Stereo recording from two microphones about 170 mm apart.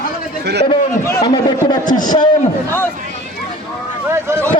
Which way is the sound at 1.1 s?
25° left (ahead or behind).